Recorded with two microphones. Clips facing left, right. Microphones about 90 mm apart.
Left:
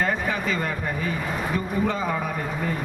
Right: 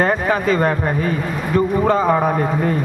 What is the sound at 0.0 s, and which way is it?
Speech, 45° right (ahead or behind).